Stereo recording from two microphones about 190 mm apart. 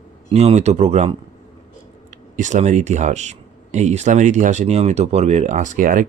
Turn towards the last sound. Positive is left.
turn(degrees=-45)  # may be behind; listen again after turning